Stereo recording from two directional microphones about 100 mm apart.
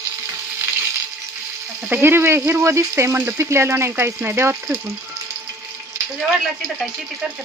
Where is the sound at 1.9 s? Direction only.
20° right (ahead or behind).